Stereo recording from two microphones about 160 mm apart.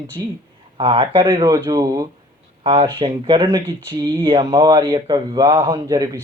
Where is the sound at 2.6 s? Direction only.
30° right (ahead or behind).